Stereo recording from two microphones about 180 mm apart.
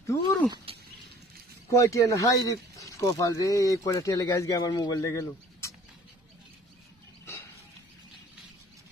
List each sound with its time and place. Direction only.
0.0 s speech: 15° left (ahead or behind)
0.7 s a sound: 30° right (ahead or behind)
1.7 s speech: 15° left (ahead or behind)